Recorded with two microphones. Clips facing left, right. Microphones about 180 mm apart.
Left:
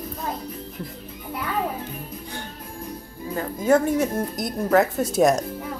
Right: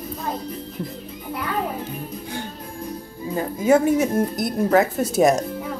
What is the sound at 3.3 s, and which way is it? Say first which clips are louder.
Speech: right 2 dB; 5° right (ahead or behind).